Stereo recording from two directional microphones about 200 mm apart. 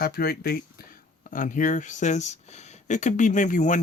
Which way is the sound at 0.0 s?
50° left (ahead or behind).